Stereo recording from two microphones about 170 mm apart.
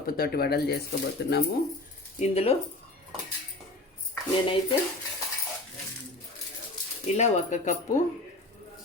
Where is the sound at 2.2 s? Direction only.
40° left (ahead or behind).